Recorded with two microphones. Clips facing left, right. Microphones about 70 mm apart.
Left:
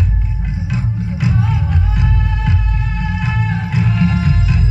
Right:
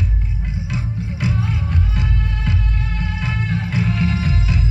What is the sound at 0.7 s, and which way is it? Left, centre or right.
Music, left.